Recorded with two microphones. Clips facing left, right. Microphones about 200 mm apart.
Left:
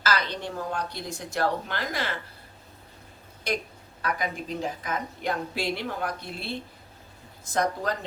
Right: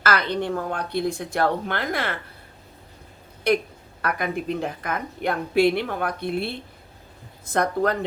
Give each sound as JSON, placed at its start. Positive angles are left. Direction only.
{"t": 0.0, "sound": "a woman's voice", "side_deg": -55}
{"t": 3.5, "sound": "a woman's voice", "side_deg": -55}